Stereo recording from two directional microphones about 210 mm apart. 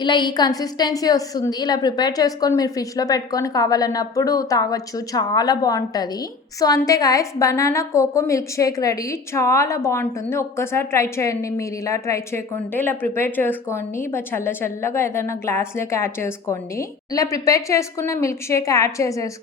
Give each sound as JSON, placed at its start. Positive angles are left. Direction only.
{"t": 0.0, "sound": "a woman's voice", "side_deg": 20}